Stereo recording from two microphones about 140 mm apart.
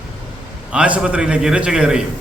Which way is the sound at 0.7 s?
10° right (ahead or behind).